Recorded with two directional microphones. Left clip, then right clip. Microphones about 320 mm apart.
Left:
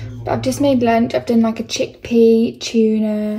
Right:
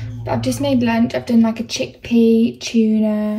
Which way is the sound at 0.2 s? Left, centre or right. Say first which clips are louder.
Left 3 dB; centre.